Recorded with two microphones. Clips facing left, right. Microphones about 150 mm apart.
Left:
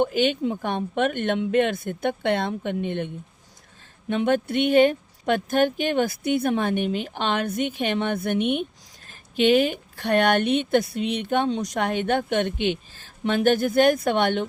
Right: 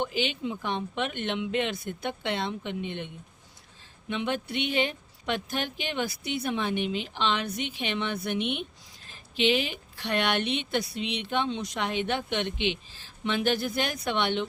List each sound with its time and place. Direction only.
0.0 s speech: 50° left (ahead or behind)
4.1 s speech: 50° left (ahead or behind)